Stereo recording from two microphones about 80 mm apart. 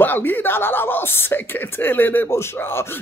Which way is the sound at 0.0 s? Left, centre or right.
Left.